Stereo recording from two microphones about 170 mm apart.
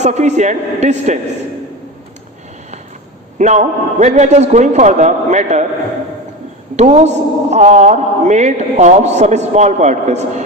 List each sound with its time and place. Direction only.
0.0 s a man's voice: 40° right (ahead or behind)
3.3 s a man's voice: 45° right (ahead or behind)
6.7 s a man's voice: 40° right (ahead or behind)